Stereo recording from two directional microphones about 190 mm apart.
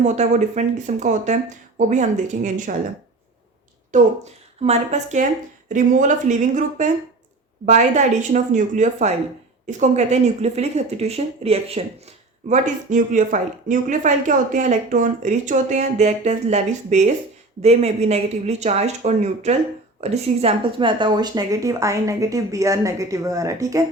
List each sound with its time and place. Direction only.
0.0 s speech: 35° right (ahead or behind)
3.9 s speech: 35° right (ahead or behind); by 23.8 s 15° right (ahead or behind)